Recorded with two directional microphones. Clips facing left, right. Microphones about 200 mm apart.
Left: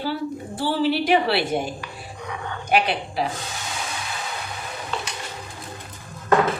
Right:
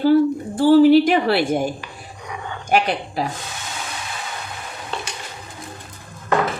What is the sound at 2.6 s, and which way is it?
Speech, 45° right (ahead or behind).